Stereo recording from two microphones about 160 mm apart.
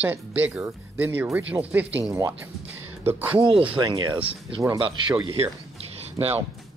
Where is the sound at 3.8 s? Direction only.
25° right (ahead or behind).